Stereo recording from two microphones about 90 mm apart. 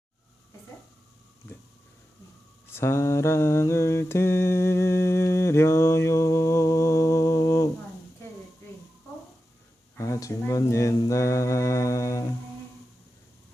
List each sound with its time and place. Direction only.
2.7 s mantra: 30° left (ahead or behind)
10.0 s a sound: 35° left (ahead or behind)
10.5 s speech: 35° left (ahead or behind)
11.0 s mantra: 35° left (ahead or behind)